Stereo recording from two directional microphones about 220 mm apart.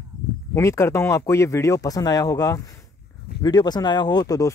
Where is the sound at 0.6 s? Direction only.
15° left (ahead or behind).